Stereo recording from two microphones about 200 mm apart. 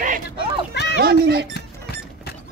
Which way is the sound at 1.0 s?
50° right (ahead or behind).